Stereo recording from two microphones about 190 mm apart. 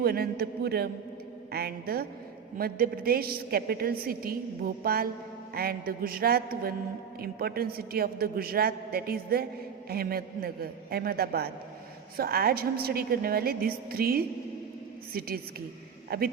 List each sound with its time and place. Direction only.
0.0 s a man's voice: 55° right (ahead or behind)
16.0 s a man's voice: 55° right (ahead or behind)